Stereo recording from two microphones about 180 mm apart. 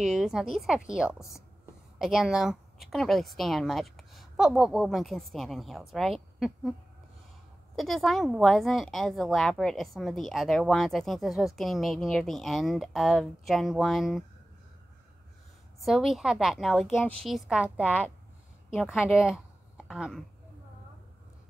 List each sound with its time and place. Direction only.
0.0 s a woman's voice: centre (ahead or behind)
7.7 s a woman's voice: centre (ahead or behind)
15.8 s a woman's voice: centre (ahead or behind)